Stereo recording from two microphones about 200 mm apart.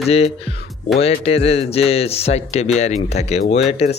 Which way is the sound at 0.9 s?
30° left (ahead or behind).